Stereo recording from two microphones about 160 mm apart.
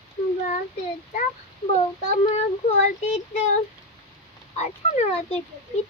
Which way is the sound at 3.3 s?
45° left (ahead or behind).